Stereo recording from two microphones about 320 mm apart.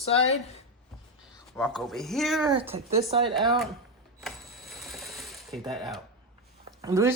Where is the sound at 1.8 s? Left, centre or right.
Centre.